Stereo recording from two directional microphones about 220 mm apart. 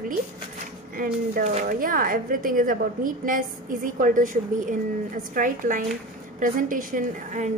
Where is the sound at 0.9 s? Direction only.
40° right (ahead or behind).